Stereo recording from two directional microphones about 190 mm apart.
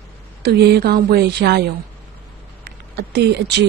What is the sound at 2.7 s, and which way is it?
Speech, 60° right (ahead or behind).